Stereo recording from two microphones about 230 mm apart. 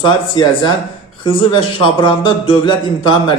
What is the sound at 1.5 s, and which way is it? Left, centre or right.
Speech, left.